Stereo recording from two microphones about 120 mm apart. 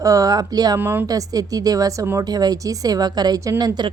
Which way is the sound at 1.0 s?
30° right (ahead or behind).